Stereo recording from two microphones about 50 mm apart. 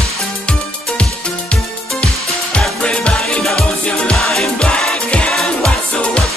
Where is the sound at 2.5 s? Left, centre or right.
Left.